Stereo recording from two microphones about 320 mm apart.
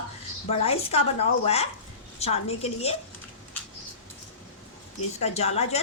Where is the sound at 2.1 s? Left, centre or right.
Centre.